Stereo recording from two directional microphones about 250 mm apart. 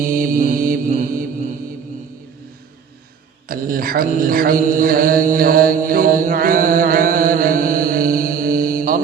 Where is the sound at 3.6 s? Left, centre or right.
Right.